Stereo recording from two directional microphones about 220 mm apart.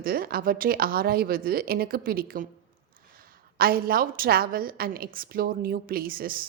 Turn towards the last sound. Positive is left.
turn(degrees=-40)  # may be behind; listen again after turning